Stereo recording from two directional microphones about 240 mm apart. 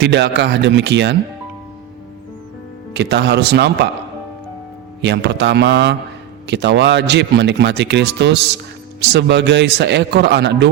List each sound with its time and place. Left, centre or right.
0.0 s speech: right
2.9 s speech: right
5.0 s speech: right